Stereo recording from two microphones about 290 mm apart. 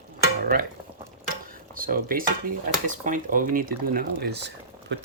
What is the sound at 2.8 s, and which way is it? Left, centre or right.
Speech, right.